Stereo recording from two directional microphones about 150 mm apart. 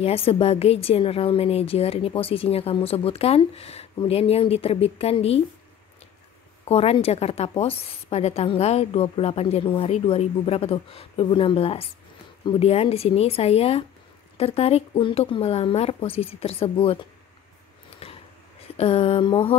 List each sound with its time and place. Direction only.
0.0 s a woman's voice: 40° left (ahead or behind)
6.6 s a woman's voice: 40° left (ahead or behind)
18.0 s a sound: 40° left (ahead or behind)
18.8 s a woman's voice: 40° left (ahead or behind)